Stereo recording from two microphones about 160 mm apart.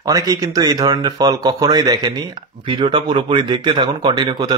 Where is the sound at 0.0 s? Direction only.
20° right (ahead or behind).